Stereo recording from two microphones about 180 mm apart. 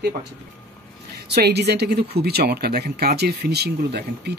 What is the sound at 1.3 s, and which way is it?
Speech, 65° right (ahead or behind).